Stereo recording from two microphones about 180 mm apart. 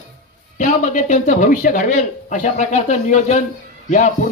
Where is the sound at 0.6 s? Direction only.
40° left (ahead or behind).